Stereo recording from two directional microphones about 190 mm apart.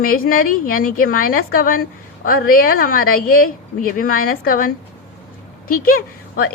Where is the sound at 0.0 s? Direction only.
50° left (ahead or behind).